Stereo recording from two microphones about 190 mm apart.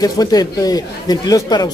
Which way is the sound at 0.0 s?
20° left (ahead or behind).